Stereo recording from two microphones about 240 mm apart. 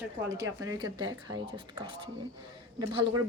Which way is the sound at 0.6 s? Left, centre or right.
Centre.